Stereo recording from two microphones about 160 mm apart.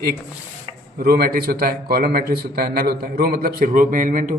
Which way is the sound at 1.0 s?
75° right (ahead or behind).